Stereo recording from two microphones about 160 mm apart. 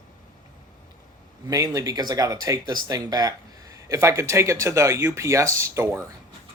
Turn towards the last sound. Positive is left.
turn(degrees=-15)  # may be behind; listen again after turning